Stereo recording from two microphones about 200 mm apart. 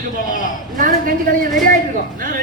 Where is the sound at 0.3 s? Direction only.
40° left (ahead or behind).